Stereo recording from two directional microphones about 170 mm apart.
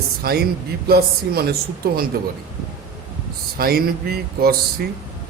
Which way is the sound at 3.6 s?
65° right (ahead or behind).